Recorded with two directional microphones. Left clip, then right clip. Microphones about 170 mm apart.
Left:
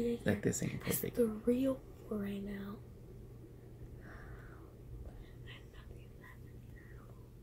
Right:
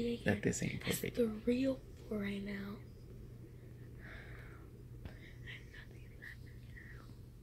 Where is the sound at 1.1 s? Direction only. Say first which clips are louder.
Left 3 dB; 20° left (ahead or behind).